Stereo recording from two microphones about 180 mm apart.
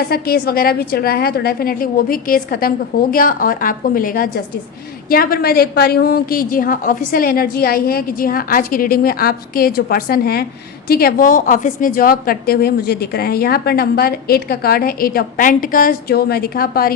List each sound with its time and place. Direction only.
0.1 s a woman's voice: 55° left (ahead or behind)